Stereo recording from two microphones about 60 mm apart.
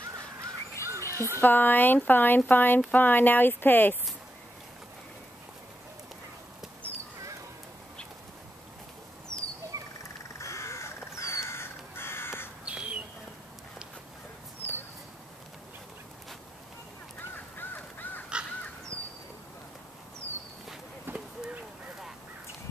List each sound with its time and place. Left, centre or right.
0.8 s music: right
1.4 s speech: left
9.3 s turkey: centre
9.7 s rodents: right
10.4 s crow: left
12.6 s bird: centre
17.2 s crow: left
21.1 s a sound: right